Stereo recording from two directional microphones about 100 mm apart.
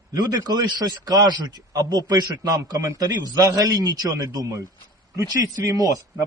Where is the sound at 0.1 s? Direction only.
40° right (ahead or behind).